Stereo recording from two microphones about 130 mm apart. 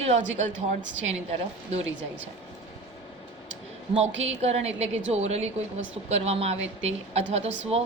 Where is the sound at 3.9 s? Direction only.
55° right (ahead or behind).